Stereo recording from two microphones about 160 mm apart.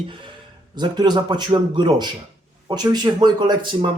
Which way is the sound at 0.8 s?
25° right (ahead or behind).